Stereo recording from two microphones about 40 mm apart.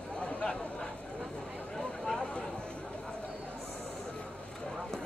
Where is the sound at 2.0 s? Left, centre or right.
Centre.